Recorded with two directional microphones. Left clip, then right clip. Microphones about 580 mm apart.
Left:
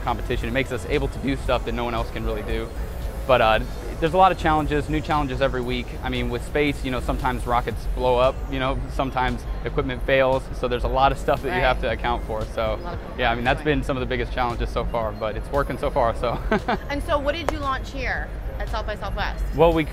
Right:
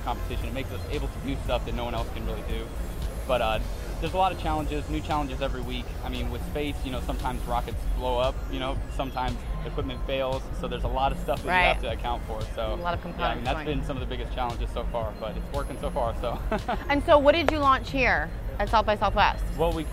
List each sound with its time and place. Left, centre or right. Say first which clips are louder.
0.0 s speech: left 7 dB; left
16.8 s speech: right 5 dB; right
19.6 s speech: left 10 dB; left